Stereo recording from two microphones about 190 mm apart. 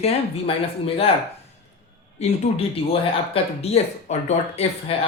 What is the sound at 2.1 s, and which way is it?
Speech, 35° left (ahead or behind).